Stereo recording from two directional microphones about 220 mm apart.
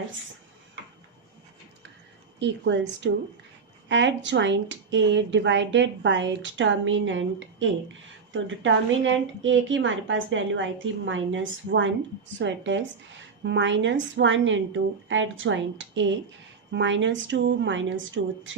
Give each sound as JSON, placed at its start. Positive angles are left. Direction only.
{"t": 2.4, "sound": "speech", "side_deg": -55}